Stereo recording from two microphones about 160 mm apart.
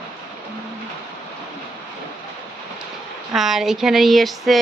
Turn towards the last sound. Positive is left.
turn(degrees=0)  # may be behind; listen again after turning